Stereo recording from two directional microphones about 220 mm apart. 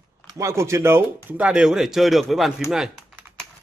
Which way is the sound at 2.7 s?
Centre (ahead or behind).